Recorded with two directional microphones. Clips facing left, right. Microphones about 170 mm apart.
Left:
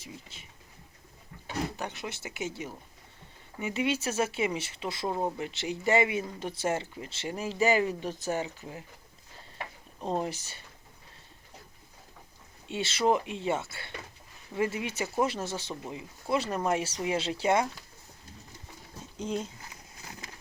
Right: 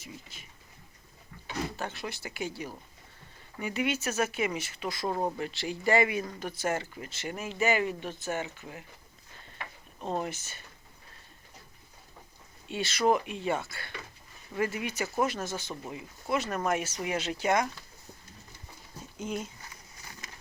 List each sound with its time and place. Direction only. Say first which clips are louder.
0.0 s speech: even; 25° left (ahead or behind)
1.7 s speech: even; 20° left (ahead or behind)
5.0 s speech: even; 10° left (ahead or behind)
5.4 s speech: even; 20° left (ahead or behind)
10.2 s speech: left 2 dB; 30° left (ahead or behind)
12.6 s speech: even; 25° left (ahead or behind)
19.2 s speech: left 2 dB; 30° left (ahead or behind)